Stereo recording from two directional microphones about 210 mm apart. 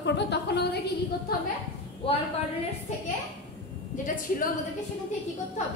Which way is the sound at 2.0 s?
25° left (ahead or behind).